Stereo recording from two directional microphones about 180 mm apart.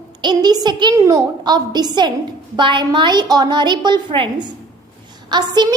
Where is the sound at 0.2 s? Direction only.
25° right (ahead or behind).